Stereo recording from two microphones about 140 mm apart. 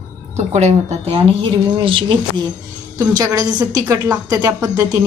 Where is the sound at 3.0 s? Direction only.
25° right (ahead or behind).